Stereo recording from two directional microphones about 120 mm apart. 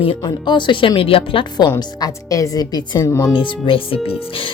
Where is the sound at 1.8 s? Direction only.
30° left (ahead or behind).